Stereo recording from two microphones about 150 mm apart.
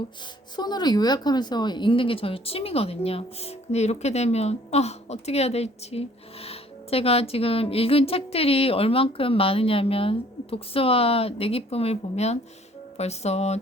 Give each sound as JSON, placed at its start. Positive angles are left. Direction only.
{"t": 0.5, "sound": "speech", "side_deg": 30}